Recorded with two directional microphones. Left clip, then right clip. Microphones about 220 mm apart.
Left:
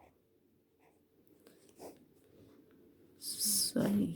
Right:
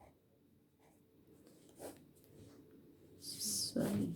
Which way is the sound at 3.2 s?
35° left (ahead or behind).